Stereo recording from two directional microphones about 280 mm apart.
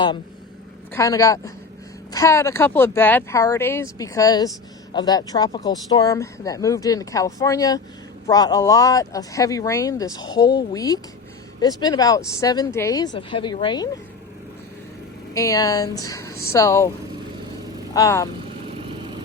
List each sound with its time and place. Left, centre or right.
0.9 s speech: centre
15.4 s speech: centre
17.9 s speech: centre